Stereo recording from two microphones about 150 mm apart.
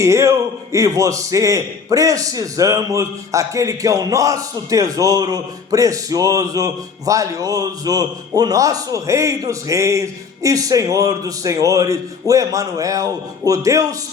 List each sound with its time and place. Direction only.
0.0 s a man's voice: 20° right (ahead or behind)